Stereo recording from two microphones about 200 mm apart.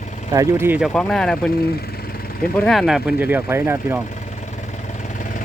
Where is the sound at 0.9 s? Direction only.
5° left (ahead or behind).